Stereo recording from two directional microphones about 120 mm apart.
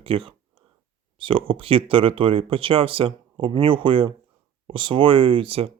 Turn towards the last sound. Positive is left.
turn(degrees=-50)  # may be behind; listen again after turning